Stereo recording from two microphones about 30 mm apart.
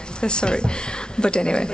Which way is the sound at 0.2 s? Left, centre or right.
Left.